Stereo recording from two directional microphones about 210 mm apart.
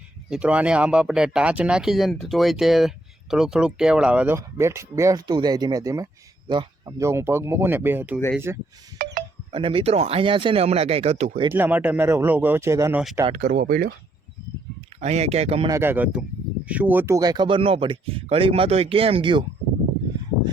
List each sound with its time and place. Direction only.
0.3 s speech: 5° right (ahead or behind)
9.0 s a sound: 40° right (ahead or behind)
9.5 s speech: 25° right (ahead or behind)
11.5 s speech: 10° right (ahead or behind)
13.2 s speech: 35° right (ahead or behind)
15.0 s speech: 30° right (ahead or behind)
15.7 s speech: 10° right (ahead or behind)